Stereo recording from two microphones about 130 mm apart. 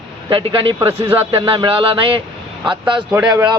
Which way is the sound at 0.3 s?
40° right (ahead or behind).